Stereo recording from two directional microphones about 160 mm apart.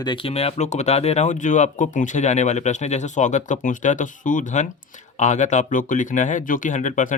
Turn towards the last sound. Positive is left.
turn(degrees=50)  # may be behind; listen again after turning